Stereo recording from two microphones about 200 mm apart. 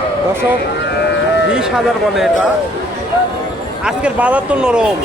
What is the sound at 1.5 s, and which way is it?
Speech, 5° right (ahead or behind).